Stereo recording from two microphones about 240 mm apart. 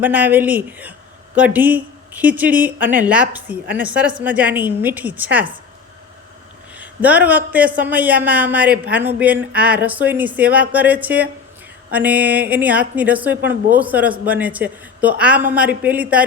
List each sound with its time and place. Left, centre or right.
0.0 s a woman's voice: centre
6.7 s a sound: centre
7.3 s a woman's voice: centre